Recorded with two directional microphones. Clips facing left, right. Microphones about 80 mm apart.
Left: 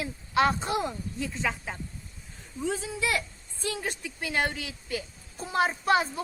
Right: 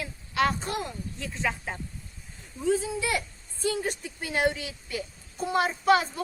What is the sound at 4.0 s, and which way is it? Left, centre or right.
Speech, left.